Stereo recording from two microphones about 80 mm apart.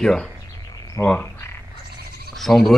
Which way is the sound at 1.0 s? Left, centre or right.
Left.